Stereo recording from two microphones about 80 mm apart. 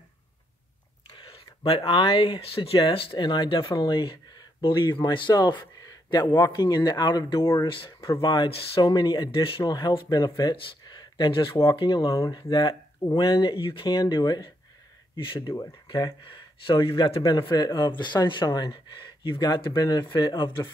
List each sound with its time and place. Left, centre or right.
1.1 s speech: left
5.3 s speech: left
6.4 s speech: left
7.6 s speech: left
8.2 s speech: left
10.5 s speech: left
11.7 s speech: left
15.1 s speech: left
15.9 s speech: left
17.5 s speech: left
20.2 s speech: left